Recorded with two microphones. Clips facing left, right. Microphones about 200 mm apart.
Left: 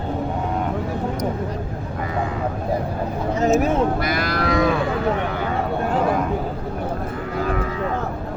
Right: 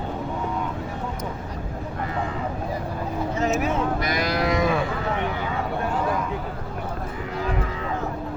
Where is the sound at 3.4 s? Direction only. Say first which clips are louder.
Left 6 dB; 45° left (ahead or behind).